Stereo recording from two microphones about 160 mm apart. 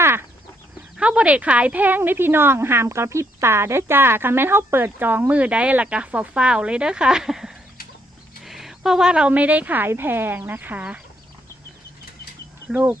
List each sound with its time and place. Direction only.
0.0 s chicken: 15° right (ahead or behind)
0.9 s a woman's voice: 5° right (ahead or behind)
12.6 s speech: 10° right (ahead or behind)